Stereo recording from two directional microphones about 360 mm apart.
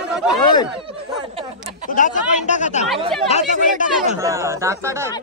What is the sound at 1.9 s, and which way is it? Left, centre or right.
Speech, left.